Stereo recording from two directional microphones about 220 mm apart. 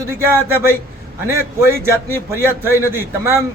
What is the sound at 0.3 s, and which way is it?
A man's voice, 10° right (ahead or behind).